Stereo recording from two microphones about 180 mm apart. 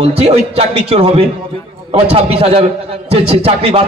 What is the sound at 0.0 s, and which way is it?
A man's voice, 35° right (ahead or behind).